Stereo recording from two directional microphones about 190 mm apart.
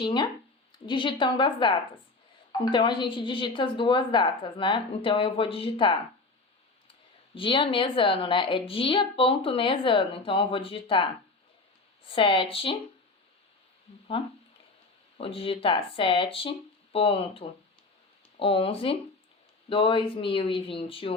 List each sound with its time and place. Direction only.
0.0 s a woman's voice: 25° left (ahead or behind)
7.3 s a woman's voice: 25° left (ahead or behind)
14.2 s a woman's voice: 30° left (ahead or behind)